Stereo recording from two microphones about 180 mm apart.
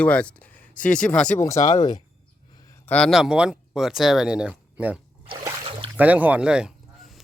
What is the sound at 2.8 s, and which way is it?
Speech, 5° left (ahead or behind).